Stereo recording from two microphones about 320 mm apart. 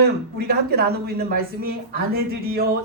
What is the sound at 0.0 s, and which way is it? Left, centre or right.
Speech, right.